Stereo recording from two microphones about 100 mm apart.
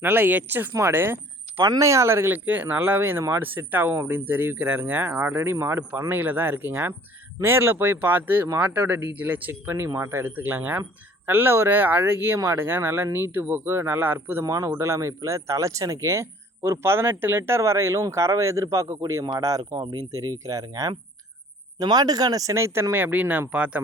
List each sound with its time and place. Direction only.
0.0 s speech: 20° right (ahead or behind)
14.4 s speech: 35° right (ahead or behind); by 23.8 s 15° right (ahead or behind)